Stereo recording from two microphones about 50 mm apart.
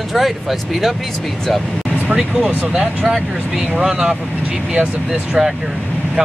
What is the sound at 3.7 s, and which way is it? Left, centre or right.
Speech, centre.